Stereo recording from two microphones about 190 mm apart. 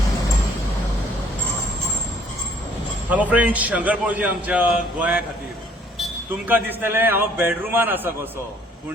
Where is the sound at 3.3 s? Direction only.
10° right (ahead or behind).